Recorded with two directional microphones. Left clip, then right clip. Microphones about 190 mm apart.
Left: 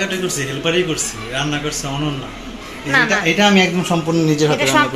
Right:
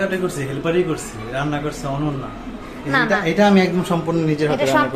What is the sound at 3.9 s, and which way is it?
Speech, 25° left (ahead or behind).